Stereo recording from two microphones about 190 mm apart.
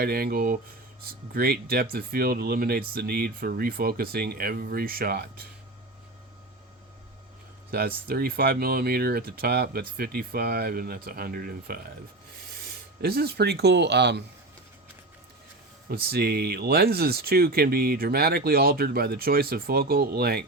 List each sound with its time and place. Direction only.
0.0 s speech: 55° right (ahead or behind)
7.7 s speech: 55° right (ahead or behind)
15.9 s speech: 55° right (ahead or behind)